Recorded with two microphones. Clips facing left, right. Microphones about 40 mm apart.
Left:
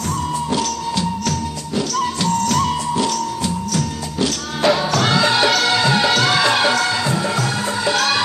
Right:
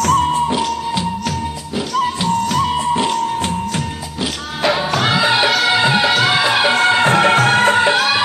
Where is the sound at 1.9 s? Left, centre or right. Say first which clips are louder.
Right 4 dB; right.